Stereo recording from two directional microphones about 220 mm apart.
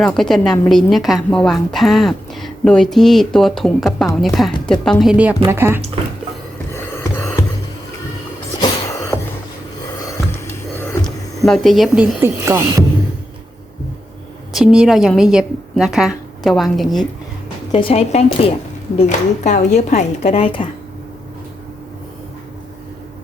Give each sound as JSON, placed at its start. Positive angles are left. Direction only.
{"t": 0.0, "sound": "a woman's voice", "side_deg": 0}
{"t": 8.6, "sound": "a sound", "side_deg": 15}
{"t": 10.8, "sound": "music", "side_deg": 5}
{"t": 12.2, "sound": "speech", "side_deg": -10}
{"t": 14.5, "sound": "a woman's voice", "side_deg": -5}
{"t": 17.7, "sound": "a woman's voice", "side_deg": 25}